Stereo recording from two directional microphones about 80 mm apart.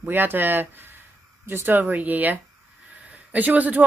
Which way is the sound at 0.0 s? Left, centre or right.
Right.